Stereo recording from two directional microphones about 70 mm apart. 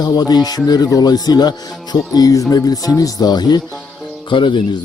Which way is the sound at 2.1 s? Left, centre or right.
Left.